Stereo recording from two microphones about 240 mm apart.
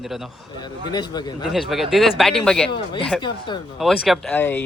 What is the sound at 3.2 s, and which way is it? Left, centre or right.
Speech, centre.